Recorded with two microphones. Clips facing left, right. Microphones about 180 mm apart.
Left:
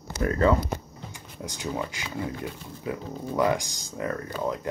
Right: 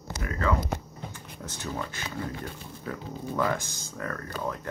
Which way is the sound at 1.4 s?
15° left (ahead or behind).